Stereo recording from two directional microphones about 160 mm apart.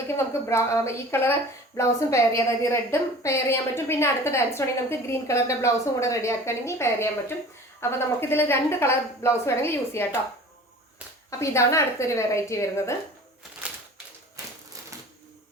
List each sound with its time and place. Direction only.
0.4 s a woman's voice: 15° left (ahead or behind)
11.3 s a woman's voice: 20° left (ahead or behind)